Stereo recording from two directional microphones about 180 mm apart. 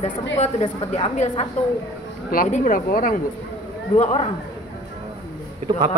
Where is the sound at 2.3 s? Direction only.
45° left (ahead or behind).